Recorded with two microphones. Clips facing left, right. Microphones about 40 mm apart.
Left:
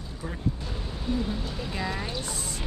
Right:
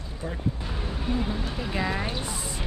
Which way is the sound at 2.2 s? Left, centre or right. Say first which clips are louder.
Right 2 dB; centre.